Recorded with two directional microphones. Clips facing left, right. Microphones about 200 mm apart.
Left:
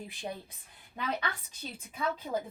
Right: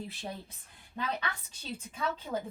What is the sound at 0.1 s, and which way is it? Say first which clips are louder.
Speech: left 2 dB; 15° left (ahead or behind).